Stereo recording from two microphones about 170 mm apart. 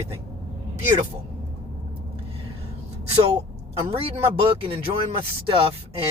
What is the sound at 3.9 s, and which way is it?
Speech, 35° right (ahead or behind).